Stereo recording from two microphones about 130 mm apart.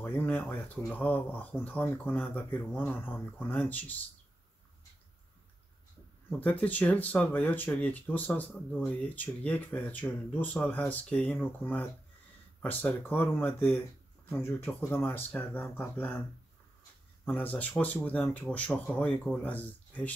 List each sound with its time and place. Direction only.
0.0 s speech: 15° left (ahead or behind)
6.4 s speech: 10° left (ahead or behind)
17.3 s speech: 10° left (ahead or behind)